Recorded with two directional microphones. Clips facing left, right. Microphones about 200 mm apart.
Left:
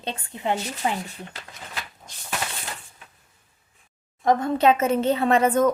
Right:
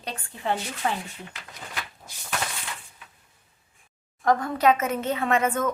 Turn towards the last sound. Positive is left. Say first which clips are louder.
# left 5 dB
turn(degrees=35)  # may be behind; listen again after turning